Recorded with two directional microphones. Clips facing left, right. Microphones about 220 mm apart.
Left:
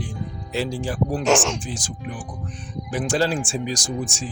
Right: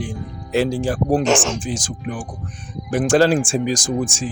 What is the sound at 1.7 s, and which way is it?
Speech, 90° right.